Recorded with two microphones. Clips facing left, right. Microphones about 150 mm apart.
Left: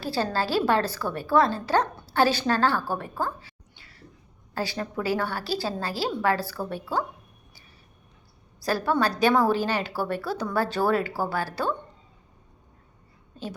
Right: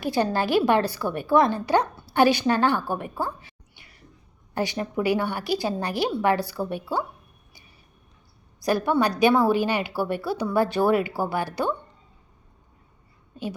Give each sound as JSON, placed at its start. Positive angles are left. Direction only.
{"t": 0.0, "sound": "a woman's voice", "side_deg": -15}
{"t": 8.6, "sound": "a woman's voice", "side_deg": -15}